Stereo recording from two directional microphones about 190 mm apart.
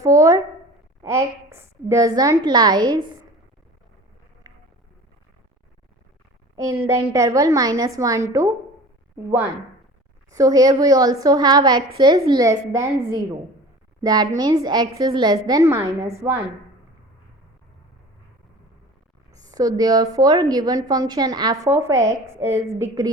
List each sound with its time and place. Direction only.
0.0 s a sound: 15° right (ahead or behind)
1.0 s a woman's voice: 15° right (ahead or behind)
4.4 s a sound: 20° right (ahead or behind)
6.8 s a woman's voice: 15° right (ahead or behind)
14.0 s a woman's voice: 20° right (ahead or behind)
19.4 s a woman's voice: 20° right (ahead or behind)